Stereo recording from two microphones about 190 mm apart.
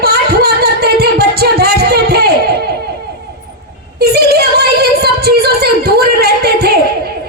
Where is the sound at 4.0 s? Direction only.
55° right (ahead or behind).